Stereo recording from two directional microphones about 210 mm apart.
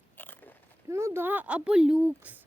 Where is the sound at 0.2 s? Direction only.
10° left (ahead or behind).